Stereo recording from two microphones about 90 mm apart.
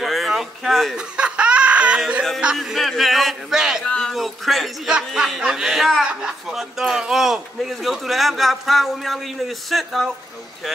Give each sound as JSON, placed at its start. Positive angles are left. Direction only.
{"t": 0.0, "sound": "a sound", "side_deg": 0}
{"t": 0.9, "sound": "laughter", "side_deg": -10}
{"t": 2.5, "sound": "speech", "side_deg": 0}
{"t": 3.8, "sound": "speech", "side_deg": 10}